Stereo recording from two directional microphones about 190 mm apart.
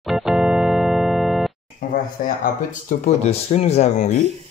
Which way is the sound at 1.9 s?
45° left (ahead or behind).